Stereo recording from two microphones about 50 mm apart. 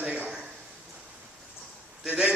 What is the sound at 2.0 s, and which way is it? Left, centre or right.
Speech, right.